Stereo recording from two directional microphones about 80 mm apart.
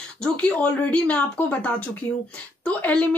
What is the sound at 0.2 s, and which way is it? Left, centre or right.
A woman's voice, centre.